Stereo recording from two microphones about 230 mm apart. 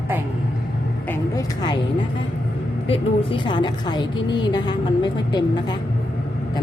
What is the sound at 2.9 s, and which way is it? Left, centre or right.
A woman's voice, left.